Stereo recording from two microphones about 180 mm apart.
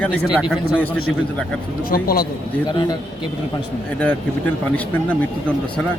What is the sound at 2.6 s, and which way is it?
Speech, 25° left (ahead or behind).